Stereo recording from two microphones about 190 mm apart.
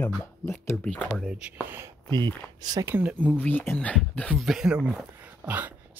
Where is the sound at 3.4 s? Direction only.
10° left (ahead or behind); by 5.7 s 10° right (ahead or behind).